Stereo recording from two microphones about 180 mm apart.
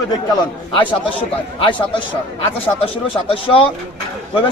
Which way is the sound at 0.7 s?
25° left (ahead or behind).